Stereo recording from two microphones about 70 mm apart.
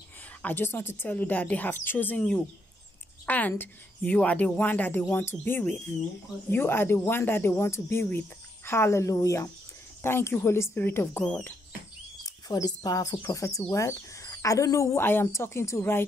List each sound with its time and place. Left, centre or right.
0.4 s a woman's voice: left
10.0 s speech: left
12.2 s speech: left
13.3 s speech: left
15.0 s speech: left